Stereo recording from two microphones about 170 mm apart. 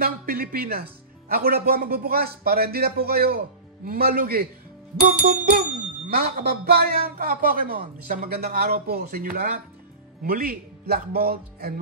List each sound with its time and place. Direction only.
0.0 s a man's voice: 60° right (ahead or behind)